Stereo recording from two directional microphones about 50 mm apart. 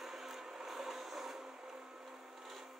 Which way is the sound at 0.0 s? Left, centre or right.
Centre.